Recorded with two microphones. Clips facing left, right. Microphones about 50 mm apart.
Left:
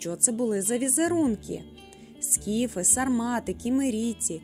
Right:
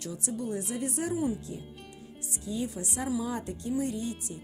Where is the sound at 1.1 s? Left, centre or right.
Left.